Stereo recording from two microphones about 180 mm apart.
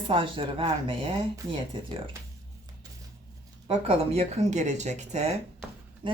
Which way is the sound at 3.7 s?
35° right (ahead or behind).